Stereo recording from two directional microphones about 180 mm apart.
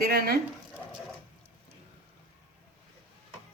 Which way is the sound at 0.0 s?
60° right (ahead or behind).